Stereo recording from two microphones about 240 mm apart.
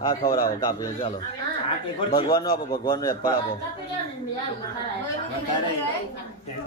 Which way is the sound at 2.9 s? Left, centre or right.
Centre.